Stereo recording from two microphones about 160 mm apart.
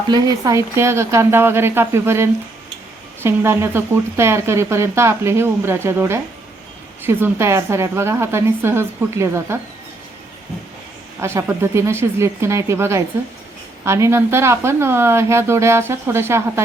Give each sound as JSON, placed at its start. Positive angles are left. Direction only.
{"t": 0.1, "sound": "speech", "side_deg": -20}
{"t": 11.2, "sound": "speech", "side_deg": -15}